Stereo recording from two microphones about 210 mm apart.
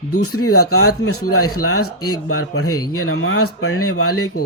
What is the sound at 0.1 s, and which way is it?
Speech, 90° left.